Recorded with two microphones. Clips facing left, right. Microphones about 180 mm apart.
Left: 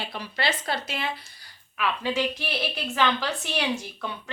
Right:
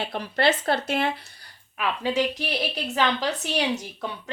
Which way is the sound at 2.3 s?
40° right (ahead or behind).